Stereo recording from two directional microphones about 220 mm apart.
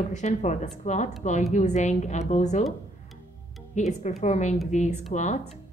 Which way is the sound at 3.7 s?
35° left (ahead or behind).